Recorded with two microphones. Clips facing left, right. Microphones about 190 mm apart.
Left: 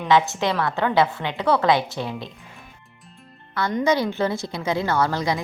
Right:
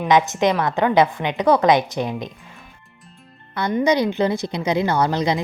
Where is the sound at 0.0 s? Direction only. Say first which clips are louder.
Right 3 dB; 15° right (ahead or behind).